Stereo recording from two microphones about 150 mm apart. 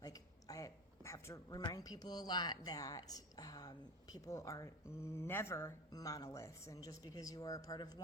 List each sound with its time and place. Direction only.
0.0 s speech: 25° left (ahead or behind)